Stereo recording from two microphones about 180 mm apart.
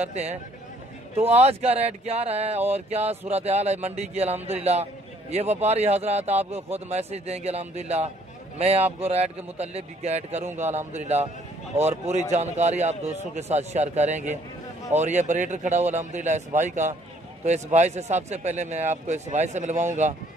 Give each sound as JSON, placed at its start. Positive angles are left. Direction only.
{"t": 0.0, "sound": "a man's voice", "side_deg": -35}